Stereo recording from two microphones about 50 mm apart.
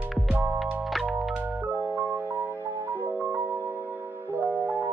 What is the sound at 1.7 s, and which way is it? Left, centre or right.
Music, right.